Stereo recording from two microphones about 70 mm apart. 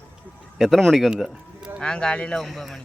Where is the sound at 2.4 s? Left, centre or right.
Centre.